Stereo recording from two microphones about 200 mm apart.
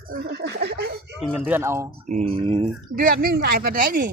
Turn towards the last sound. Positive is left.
turn(degrees=-45)  # may be behind; listen again after turning